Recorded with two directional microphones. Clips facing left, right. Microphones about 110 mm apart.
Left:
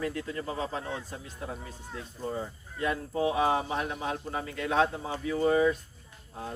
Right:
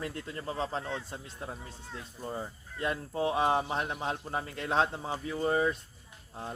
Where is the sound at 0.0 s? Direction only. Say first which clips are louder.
Left 4 dB; 35° right (ahead or behind).